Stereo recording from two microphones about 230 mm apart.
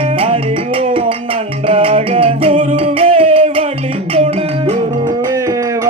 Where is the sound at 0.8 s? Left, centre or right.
Right.